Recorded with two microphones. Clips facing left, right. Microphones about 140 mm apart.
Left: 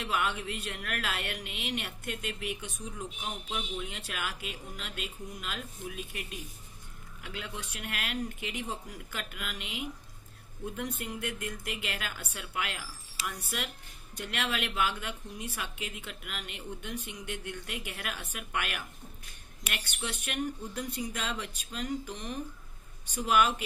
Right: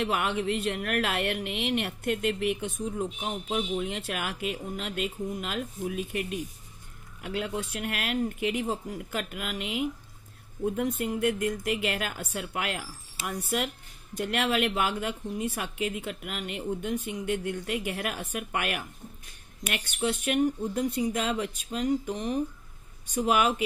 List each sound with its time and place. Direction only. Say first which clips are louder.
0.0 s a woman's voice: right 5 dB; 55° right (ahead or behind)
11.0 s a woman's voice: right 10 dB; 50° right (ahead or behind)